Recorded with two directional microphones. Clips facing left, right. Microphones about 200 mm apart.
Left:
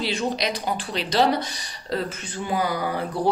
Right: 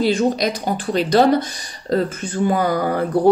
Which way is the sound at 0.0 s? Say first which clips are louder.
Right 8 dB; 50° right (ahead or behind).